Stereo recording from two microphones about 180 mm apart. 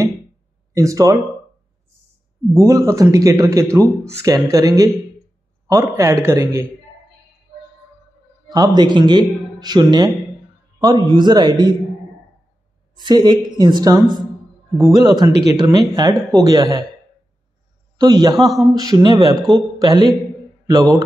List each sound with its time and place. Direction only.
0.7 s a man's voice: 15° right (ahead or behind)
2.5 s a man's voice: 20° right (ahead or behind)
8.5 s a man's voice: 20° right (ahead or behind)
12.9 s speech: 25° right (ahead or behind)
17.9 s a man's voice: 20° right (ahead or behind)